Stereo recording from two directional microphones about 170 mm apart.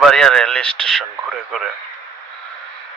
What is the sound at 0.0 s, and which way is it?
Speech, centre (ahead or behind).